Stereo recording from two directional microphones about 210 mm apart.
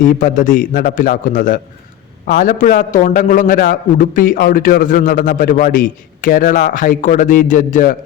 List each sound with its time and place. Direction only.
0.2 s a man's voice: 40° left (ahead or behind)